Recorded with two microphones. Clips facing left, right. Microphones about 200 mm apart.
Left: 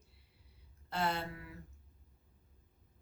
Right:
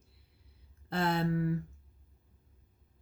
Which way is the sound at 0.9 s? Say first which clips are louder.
Right 6 dB; 55° right (ahead or behind).